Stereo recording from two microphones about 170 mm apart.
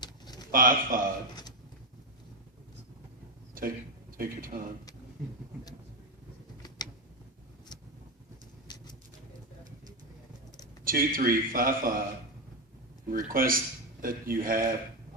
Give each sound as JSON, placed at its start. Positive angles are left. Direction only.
{"t": 0.0, "sound": "a sound", "side_deg": 25}
{"t": 0.5, "sound": "speech", "side_deg": -55}
{"t": 3.6, "sound": "a man's voice", "side_deg": -55}
{"t": 8.6, "sound": "pigeon", "side_deg": 25}
{"t": 10.8, "sound": "speech", "side_deg": -55}
{"t": 13.1, "sound": "speech", "side_deg": -55}